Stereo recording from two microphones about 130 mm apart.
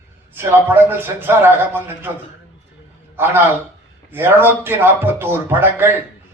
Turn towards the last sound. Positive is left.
turn(degrees=-15)  # may be behind; listen again after turning